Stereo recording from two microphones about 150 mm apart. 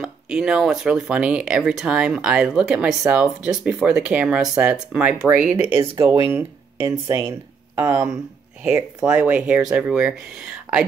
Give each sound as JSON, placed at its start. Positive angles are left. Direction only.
{"t": 0.0, "sound": "speech", "side_deg": -5}
{"t": 5.8, "sound": "speech", "side_deg": -25}